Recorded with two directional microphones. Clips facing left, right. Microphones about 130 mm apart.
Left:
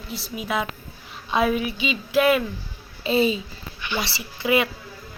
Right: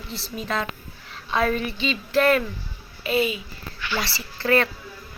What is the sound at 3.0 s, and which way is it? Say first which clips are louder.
Speech: left 3 dB; 30° left (ahead or behind).